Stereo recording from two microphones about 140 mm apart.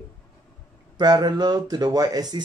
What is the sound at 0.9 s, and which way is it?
Speech, 30° right (ahead or behind).